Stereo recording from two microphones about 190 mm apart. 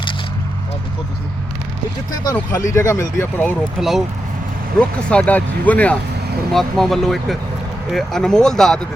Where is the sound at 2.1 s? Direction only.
20° left (ahead or behind).